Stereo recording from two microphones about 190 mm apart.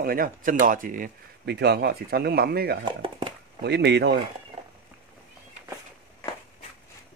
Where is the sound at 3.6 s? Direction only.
65° right (ahead or behind).